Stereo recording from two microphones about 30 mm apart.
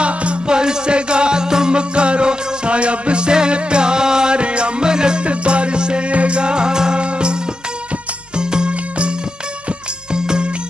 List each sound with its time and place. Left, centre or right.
0.0 s music: right
0.5 s music: right
1.8 s music: right
4.4 s music: right
5.2 s music: right
8.4 s music: right
10.1 s music: right